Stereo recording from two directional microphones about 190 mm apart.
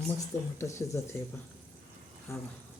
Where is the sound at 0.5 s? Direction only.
15° left (ahead or behind).